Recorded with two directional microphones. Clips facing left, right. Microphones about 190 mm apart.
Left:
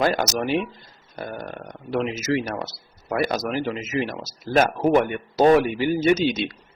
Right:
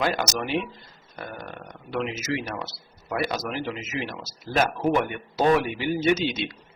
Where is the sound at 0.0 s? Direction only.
45° left (ahead or behind).